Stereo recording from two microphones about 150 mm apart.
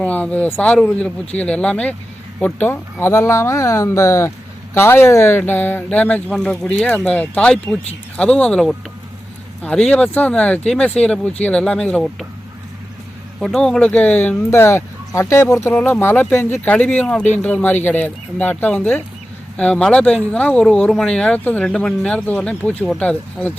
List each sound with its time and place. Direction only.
0.0 s speech: 10° left (ahead or behind)
13.4 s speech: 5° left (ahead or behind)